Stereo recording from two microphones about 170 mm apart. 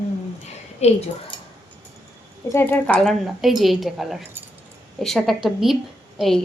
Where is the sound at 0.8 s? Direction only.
40° left (ahead or behind).